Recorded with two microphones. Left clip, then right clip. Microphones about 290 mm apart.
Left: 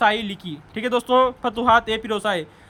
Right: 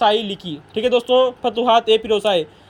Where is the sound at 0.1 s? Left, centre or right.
Centre.